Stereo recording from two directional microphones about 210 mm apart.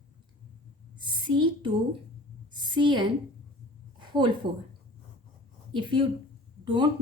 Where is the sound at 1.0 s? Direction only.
25° right (ahead or behind).